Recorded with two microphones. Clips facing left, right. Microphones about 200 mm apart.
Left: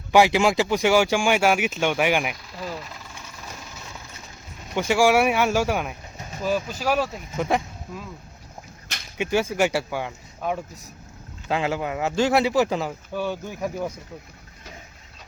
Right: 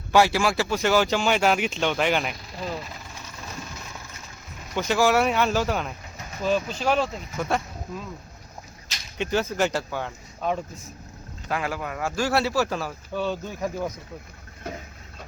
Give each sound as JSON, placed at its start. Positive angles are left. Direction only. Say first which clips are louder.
{"t": 0.1, "sound": "speech", "louder": "left 3 dB", "side_deg": 15}
{"t": 4.7, "sound": "speech", "louder": "left 2 dB", "side_deg": 10}
{"t": 9.1, "sound": "speech", "louder": "left 2 dB", "side_deg": 10}
{"t": 11.4, "sound": "speech", "louder": "left 4 dB", "side_deg": 25}